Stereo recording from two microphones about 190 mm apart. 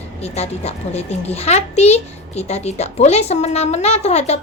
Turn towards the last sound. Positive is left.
turn(degrees=35)  # may be behind; listen again after turning